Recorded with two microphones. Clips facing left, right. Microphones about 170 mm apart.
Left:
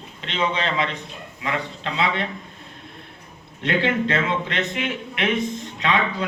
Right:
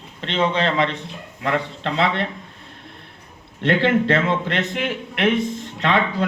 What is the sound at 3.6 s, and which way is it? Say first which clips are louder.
A man's voice: right 4 dB; 55° right (ahead or behind).